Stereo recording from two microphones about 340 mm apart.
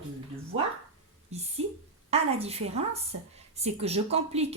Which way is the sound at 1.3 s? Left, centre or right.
Centre.